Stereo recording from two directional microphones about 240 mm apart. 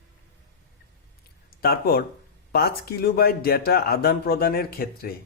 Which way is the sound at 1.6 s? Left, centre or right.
Left.